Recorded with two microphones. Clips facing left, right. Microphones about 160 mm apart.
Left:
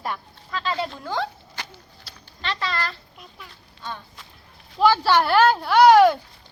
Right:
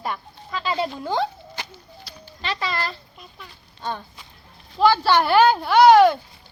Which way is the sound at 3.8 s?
30° right (ahead or behind).